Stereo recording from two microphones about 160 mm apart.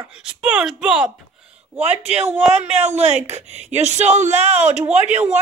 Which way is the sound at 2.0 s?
5° right (ahead or behind).